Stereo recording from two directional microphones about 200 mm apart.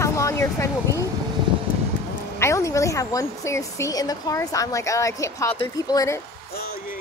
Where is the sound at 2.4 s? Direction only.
15° left (ahead or behind).